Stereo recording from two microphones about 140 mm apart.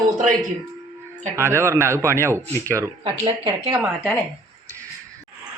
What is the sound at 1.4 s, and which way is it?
Speech, 20° right (ahead or behind).